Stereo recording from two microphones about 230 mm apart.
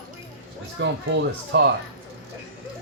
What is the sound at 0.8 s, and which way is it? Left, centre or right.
Speech, right.